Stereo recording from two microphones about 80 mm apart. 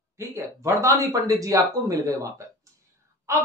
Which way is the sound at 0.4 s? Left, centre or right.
Right.